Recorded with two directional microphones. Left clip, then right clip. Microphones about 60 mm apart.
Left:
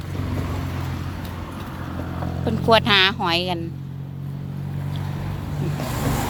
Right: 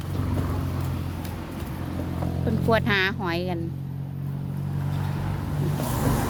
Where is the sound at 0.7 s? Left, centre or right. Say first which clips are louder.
Left 2 dB; left.